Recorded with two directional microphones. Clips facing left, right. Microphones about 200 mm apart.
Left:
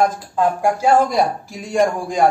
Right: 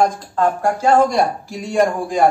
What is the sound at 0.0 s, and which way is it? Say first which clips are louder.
A man's voice: even; 10° left (ahead or behind).